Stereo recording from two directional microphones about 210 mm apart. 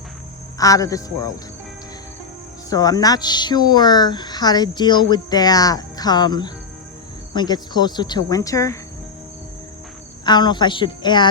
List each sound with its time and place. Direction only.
0.6 s a man's voice: 15° left (ahead or behind)
2.6 s speech: 15° left (ahead or behind)
10.2 s speech: 20° left (ahead or behind)